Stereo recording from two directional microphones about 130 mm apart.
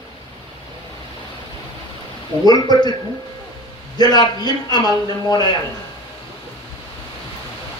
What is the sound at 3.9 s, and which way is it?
A man's voice, 30° left (ahead or behind).